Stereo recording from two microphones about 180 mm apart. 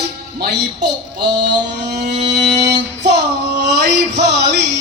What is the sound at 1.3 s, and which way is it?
Mantra, 70° right (ahead or behind).